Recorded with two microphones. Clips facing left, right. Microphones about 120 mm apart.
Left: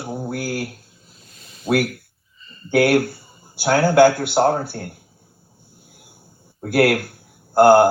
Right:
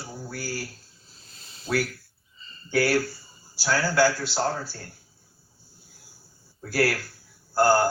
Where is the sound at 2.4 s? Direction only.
30° right (ahead or behind).